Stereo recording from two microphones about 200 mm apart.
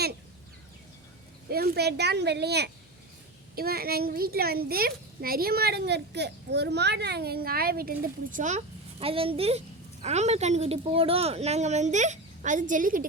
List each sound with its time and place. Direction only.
1.5 s a woman's voice: 50° right (ahead or behind)